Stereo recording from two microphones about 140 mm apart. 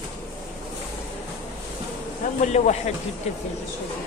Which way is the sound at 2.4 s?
55° left (ahead or behind).